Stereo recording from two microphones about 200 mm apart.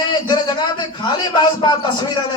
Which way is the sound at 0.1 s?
20° left (ahead or behind).